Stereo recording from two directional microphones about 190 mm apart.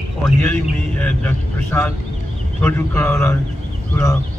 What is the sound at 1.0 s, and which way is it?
Speech, 10° left (ahead or behind).